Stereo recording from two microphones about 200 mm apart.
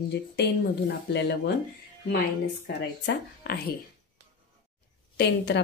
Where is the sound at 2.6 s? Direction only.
55° left (ahead or behind).